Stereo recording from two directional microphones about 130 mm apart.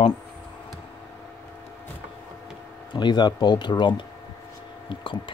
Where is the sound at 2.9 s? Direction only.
35° left (ahead or behind).